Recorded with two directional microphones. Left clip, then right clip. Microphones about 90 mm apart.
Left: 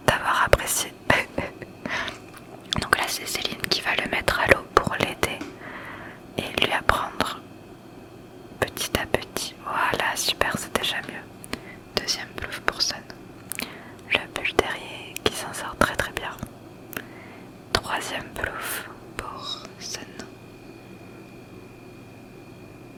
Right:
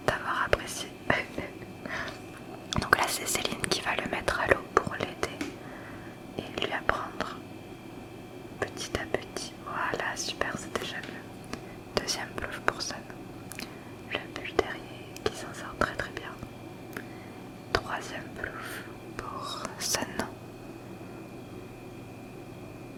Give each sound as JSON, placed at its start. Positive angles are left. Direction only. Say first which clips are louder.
{"t": 0.0, "sound": "whispering", "louder": "left 8 dB", "side_deg": 35}
{"t": 2.7, "sound": "whispering", "louder": "left 2 dB", "side_deg": -5}
{"t": 3.9, "sound": "whispering", "louder": "left 6 dB", "side_deg": 10}
{"t": 4.4, "sound": "whispering", "louder": "left 6 dB", "side_deg": 30}
{"t": 8.5, "sound": "whispering", "louder": "left 8 dB", "side_deg": 40}
{"t": 11.9, "sound": "whispering", "louder": "left 4 dB", "side_deg": -10}
{"t": 12.5, "sound": "whispering", "louder": "left 7 dB", "side_deg": 5}
{"t": 13.6, "sound": "whispering", "louder": "left 9 dB", "side_deg": 25}
{"t": 14.1, "sound": "whispering", "louder": "left 11 dB", "side_deg": 35}
{"t": 17.7, "sound": "whispering", "louder": "left 6 dB", "side_deg": 25}
{"t": 19.4, "sound": "whispering", "louder": "left 1 dB", "side_deg": -20}
{"t": 19.6, "sound": "whispering", "louder": "right 4 dB", "side_deg": -40}